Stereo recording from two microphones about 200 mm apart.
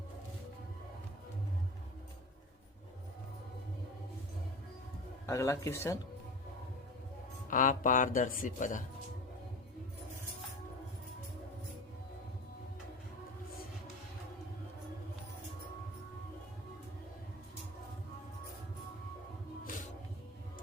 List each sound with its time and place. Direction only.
5.2 s speech: 15° left (ahead or behind)
7.5 s speech: 40° left (ahead or behind)
19.6 s music: 40° left (ahead or behind)